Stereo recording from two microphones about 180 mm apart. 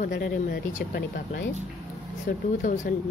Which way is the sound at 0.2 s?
50° left (ahead or behind).